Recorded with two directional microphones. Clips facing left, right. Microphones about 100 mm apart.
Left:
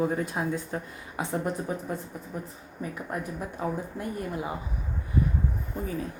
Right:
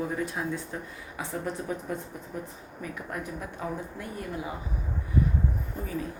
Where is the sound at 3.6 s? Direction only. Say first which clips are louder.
Left 3 dB; 30° left (ahead or behind).